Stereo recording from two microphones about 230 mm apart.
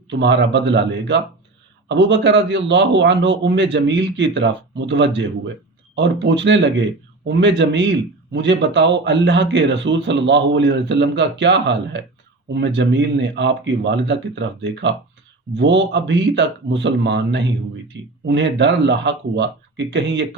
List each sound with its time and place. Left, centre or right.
0.1 s a man's voice: right